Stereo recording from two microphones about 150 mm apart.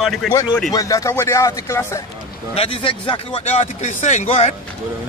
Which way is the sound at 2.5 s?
35° left (ahead or behind).